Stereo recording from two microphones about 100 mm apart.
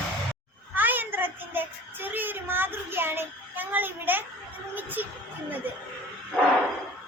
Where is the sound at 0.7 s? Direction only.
20° right (ahead or behind).